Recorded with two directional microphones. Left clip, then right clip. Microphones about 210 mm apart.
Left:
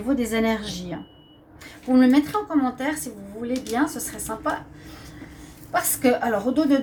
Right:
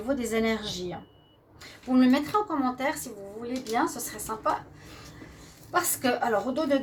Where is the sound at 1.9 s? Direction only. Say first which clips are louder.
Left 4 dB; 40° right (ahead or behind).